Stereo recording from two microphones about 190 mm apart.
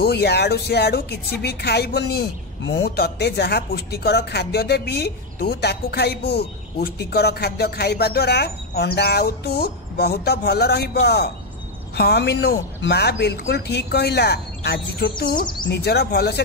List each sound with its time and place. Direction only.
0.0 s speech: 60° left (ahead or behind)